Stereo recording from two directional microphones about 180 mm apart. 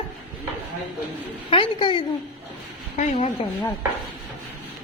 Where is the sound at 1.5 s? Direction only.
30° left (ahead or behind).